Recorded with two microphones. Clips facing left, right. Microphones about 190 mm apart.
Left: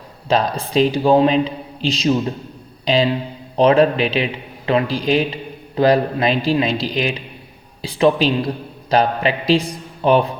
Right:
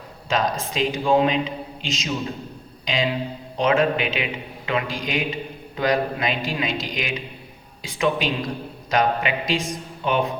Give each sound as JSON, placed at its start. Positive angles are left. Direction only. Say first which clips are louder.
{"t": 0.7, "sound": "a man's voice", "louder": "left 7 dB", "side_deg": 35}